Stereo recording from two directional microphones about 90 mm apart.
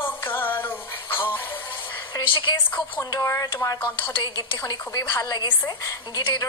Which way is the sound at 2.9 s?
30° left (ahead or behind).